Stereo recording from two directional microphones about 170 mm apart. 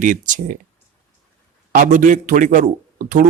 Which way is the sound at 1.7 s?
50° right (ahead or behind).